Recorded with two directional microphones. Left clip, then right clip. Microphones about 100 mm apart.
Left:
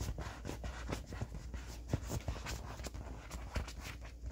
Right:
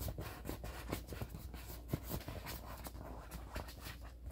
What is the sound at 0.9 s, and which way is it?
Horse, 15° left (ahead or behind).